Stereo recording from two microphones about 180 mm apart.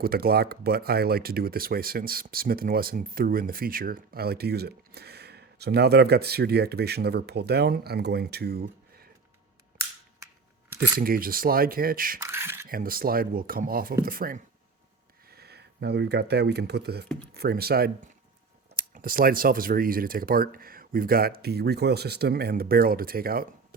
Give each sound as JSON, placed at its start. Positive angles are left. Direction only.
{"t": 0.0, "sound": "speech", "side_deg": -55}
{"t": 11.0, "sound": "speech", "side_deg": -55}
{"t": 12.2, "sound": "speech", "side_deg": -15}
{"t": 12.6, "sound": "speech", "side_deg": -55}
{"t": 15.3, "sound": "speech", "side_deg": -60}